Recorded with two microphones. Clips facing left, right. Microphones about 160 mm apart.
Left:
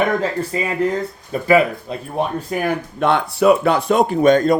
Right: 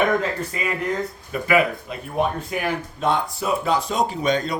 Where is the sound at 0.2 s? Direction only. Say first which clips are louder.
Left 5 dB; 30° left (ahead or behind).